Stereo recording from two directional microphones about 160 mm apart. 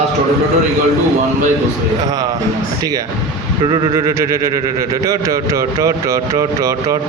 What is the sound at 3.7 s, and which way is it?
A man's voice, 30° right (ahead or behind).